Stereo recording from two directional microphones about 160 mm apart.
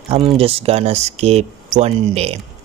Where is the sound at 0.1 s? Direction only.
35° right (ahead or behind).